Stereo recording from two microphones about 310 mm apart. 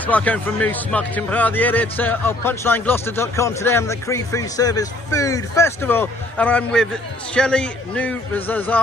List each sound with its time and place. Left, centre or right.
0.0 s speech: centre